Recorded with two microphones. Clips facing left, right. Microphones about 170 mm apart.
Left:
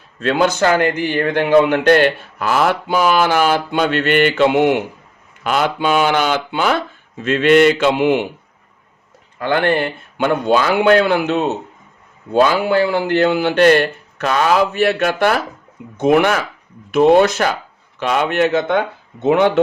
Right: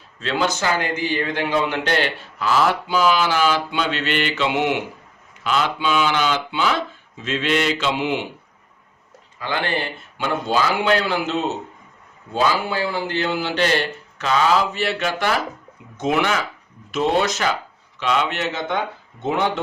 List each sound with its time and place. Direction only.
0.2 s a man's voice: 55° left (ahead or behind)
9.4 s a man's voice: 55° left (ahead or behind)